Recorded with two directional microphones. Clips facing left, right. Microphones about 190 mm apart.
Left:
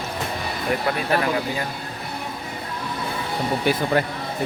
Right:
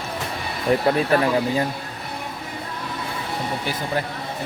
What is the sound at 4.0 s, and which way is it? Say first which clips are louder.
Speech: left 4 dB; 65° left (ahead or behind).